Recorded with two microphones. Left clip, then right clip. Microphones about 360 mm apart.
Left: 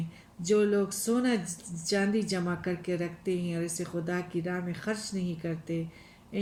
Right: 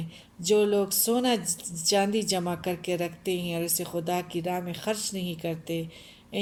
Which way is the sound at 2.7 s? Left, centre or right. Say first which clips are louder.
Right 4 dB; right.